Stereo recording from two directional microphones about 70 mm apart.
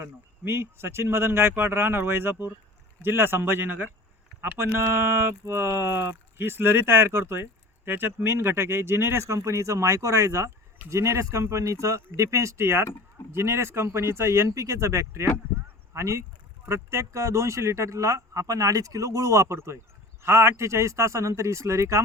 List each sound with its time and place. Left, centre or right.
0.0 s speech: right
15.5 s a sound: right
16.6 s speech: right